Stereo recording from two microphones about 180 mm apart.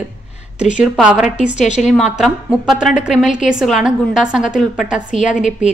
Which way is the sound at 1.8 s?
Centre (ahead or behind).